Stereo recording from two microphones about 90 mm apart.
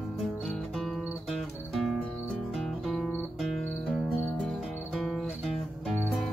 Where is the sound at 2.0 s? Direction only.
20° left (ahead or behind).